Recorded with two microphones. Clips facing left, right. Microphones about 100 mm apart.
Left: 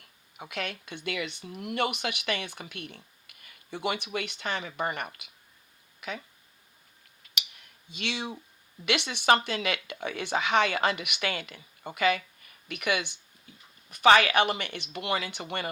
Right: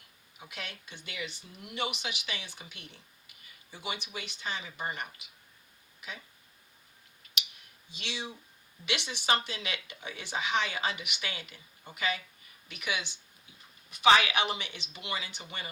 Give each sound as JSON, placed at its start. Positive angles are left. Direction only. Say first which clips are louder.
{"t": 0.3, "sound": "speech", "louder": "left 8 dB", "side_deg": 60}
{"t": 7.9, "sound": "speech", "louder": "left 6 dB", "side_deg": 60}